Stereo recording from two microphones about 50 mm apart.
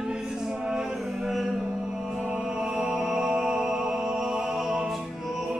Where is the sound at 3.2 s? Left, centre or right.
Centre.